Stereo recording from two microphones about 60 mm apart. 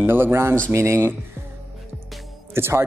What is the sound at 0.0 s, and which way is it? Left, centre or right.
Speech, right.